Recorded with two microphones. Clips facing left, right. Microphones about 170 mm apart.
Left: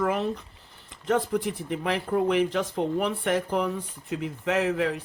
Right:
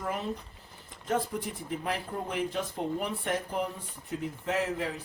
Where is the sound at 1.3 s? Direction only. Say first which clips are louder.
Left 8 dB; 90° left.